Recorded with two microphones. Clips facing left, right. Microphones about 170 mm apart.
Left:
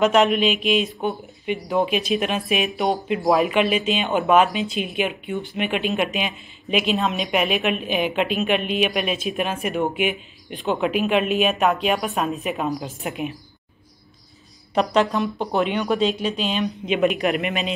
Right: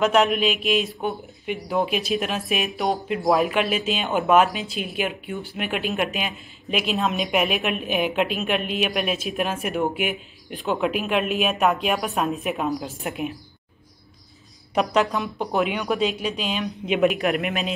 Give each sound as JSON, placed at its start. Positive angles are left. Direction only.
{"t": 0.0, "sound": "a woman's voice", "side_deg": 0}
{"t": 14.7, "sound": "a woman's voice", "side_deg": -5}